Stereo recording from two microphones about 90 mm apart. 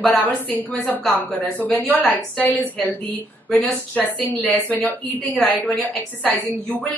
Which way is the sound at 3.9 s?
20° left (ahead or behind).